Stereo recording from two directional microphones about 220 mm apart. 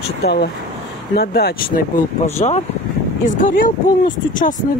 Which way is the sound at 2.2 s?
30° left (ahead or behind).